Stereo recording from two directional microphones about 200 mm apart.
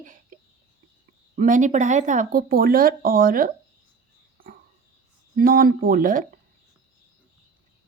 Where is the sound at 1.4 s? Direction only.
40° right (ahead or behind).